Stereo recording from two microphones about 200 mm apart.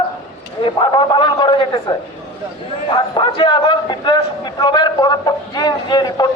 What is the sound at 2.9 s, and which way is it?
A man's voice, 20° left (ahead or behind).